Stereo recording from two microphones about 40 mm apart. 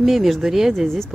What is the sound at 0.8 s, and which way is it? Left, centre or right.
Speech, centre.